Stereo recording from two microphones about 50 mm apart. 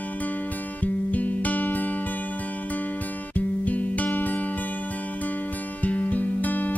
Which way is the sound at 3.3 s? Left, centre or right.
Left.